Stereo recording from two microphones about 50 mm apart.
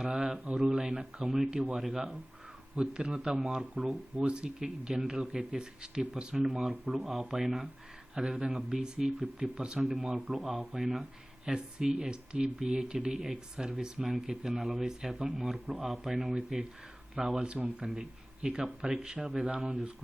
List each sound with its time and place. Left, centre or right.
0.0 s speech: centre
4.3 s speech: centre